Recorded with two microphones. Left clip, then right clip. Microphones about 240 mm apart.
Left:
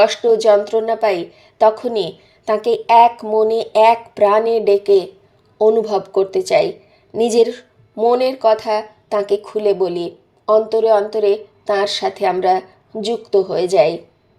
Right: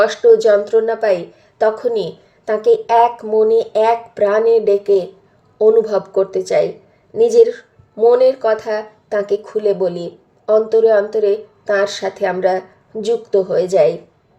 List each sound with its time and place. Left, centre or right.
0.0 s a woman's voice: left